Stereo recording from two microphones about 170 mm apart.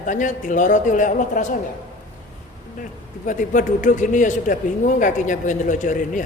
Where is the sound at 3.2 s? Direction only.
50° left (ahead or behind).